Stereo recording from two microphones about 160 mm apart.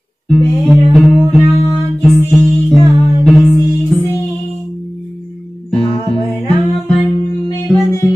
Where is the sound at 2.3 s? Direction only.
Centre (ahead or behind).